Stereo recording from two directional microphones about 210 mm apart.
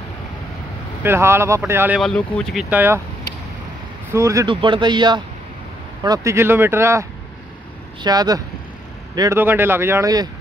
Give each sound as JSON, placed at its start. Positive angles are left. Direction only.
{"t": 1.0, "sound": "speech", "side_deg": -10}
{"t": 2.0, "sound": "speech", "side_deg": 5}
{"t": 2.7, "sound": "speech", "side_deg": -10}
{"t": 4.1, "sound": "speech", "side_deg": -15}